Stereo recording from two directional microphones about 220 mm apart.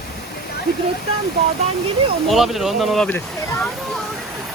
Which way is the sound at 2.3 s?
Centre (ahead or behind).